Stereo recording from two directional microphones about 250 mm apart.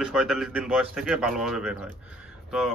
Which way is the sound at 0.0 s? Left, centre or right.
Centre.